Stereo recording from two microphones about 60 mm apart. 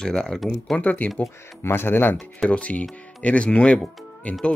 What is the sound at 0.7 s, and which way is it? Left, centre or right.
Speech, left.